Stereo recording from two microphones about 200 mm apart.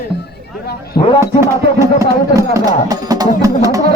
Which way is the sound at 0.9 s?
25° left (ahead or behind).